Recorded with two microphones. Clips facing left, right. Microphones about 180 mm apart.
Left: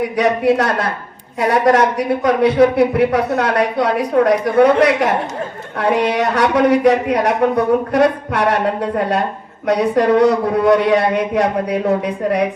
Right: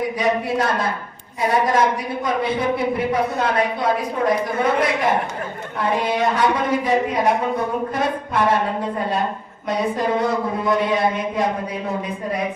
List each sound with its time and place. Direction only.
0.2 s a man's voice: 70° left (ahead or behind)
5.8 s a man's voice: 70° left (ahead or behind)